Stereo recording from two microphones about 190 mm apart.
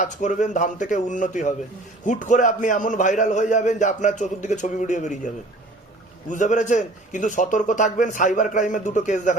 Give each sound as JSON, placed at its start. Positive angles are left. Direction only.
{"t": 0.0, "sound": "a man's voice", "side_deg": 40}